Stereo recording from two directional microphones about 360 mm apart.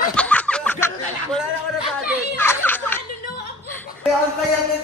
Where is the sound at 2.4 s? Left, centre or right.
Centre.